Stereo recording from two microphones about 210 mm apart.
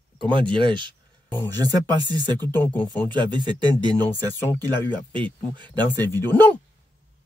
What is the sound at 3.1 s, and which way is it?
Speech, 20° right (ahead or behind).